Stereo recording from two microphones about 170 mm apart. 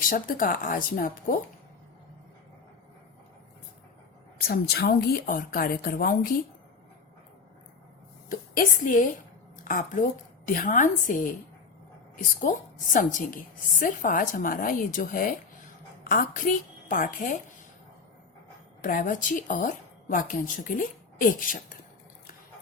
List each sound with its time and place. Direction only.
0.1 s a woman's voice: 50° left (ahead or behind)
4.4 s a woman's voice: 65° left (ahead or behind)
8.3 s a woman's voice: 50° left (ahead or behind)
18.8 s a woman's voice: 50° left (ahead or behind)